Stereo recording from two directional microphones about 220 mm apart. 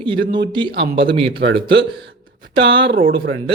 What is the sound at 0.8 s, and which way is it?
Speech, 55° right (ahead or behind).